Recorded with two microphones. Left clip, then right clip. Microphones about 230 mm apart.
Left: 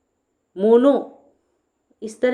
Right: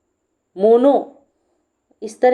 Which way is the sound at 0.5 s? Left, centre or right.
Centre.